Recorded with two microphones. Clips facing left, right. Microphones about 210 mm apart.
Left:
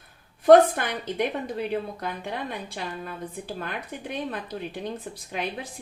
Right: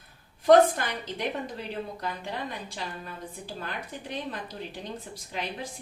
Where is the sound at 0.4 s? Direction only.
60° left (ahead or behind).